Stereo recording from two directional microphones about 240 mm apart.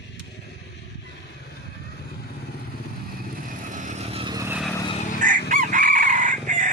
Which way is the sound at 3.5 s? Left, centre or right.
Right.